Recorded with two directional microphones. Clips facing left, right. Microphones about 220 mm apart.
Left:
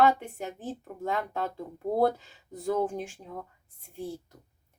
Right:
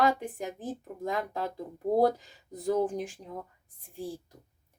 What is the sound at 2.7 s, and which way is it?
Speech, 35° right (ahead or behind).